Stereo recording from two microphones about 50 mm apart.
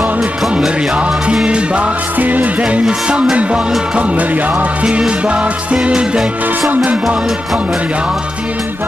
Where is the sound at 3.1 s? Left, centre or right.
Right.